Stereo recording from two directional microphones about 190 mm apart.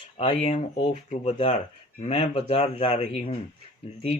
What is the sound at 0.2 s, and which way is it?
Speech, 30° left (ahead or behind).